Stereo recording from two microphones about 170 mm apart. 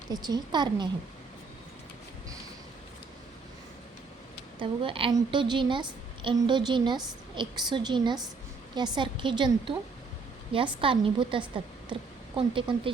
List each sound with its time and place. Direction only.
0.1 s a woman's voice: 25° right (ahead or behind)
4.6 s a woman's voice: 30° right (ahead or behind)
10.8 s a woman's voice: 30° right (ahead or behind)